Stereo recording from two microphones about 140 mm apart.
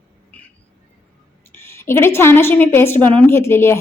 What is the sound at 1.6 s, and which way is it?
A woman's voice, 20° left (ahead or behind).